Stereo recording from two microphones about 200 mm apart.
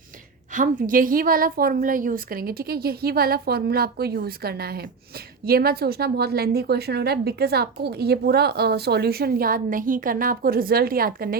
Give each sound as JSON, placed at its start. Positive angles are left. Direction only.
{"t": 0.5, "sound": "a woman's voice", "side_deg": -40}